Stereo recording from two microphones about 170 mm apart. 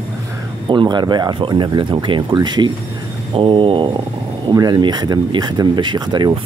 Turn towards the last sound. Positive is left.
turn(degrees=-25)  # may be behind; listen again after turning